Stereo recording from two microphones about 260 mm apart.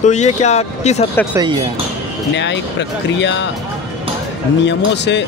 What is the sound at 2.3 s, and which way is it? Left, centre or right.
Speech, left.